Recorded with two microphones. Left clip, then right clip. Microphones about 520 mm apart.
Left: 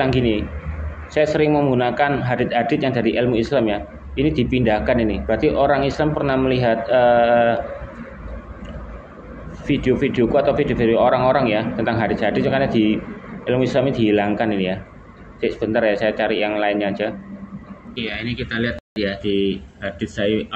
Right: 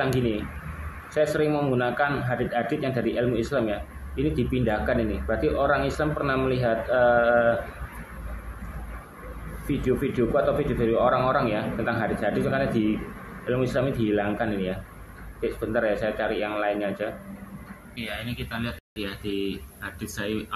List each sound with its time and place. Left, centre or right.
0.0 s a man's voice: right
9.7 s a man's voice: right